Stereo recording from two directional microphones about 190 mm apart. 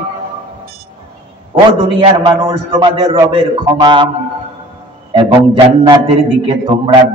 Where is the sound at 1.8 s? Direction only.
30° right (ahead or behind).